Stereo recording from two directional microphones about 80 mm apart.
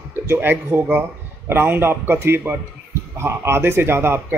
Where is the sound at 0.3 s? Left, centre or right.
Right.